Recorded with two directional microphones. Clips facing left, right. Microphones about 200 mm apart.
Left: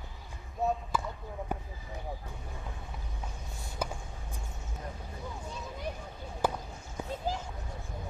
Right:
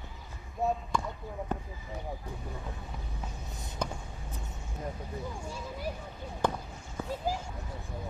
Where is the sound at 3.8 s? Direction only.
5° left (ahead or behind).